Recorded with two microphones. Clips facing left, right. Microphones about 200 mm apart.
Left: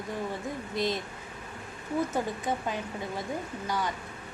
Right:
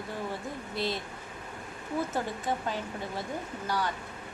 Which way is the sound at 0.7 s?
15° left (ahead or behind).